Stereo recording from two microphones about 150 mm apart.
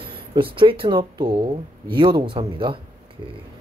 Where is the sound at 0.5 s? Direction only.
35° right (ahead or behind).